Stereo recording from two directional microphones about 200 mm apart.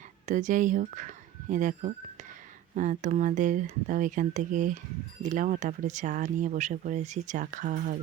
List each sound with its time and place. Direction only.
0.3 s speech: 40° right (ahead or behind)